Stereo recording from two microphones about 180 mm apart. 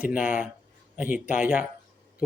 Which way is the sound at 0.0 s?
10° right (ahead or behind).